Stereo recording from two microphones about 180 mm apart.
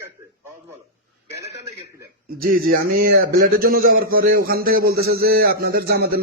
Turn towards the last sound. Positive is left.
turn(degrees=-60)  # may be behind; listen again after turning